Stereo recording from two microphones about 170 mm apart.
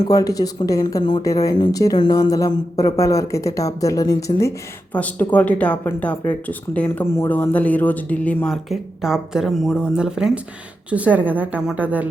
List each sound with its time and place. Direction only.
0.0 s speech: 20° left (ahead or behind)
4.9 s a woman's voice: 10° left (ahead or behind); by 12.0 s 10° right (ahead or behind)